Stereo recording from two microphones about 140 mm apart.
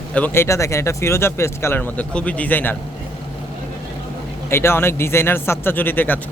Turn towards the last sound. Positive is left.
turn(degrees=15)  # may be behind; listen again after turning